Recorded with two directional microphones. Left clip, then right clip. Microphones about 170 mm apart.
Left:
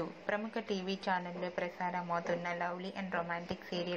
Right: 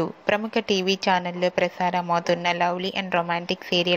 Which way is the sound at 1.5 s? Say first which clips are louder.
Right 11 dB; 45° right (ahead or behind).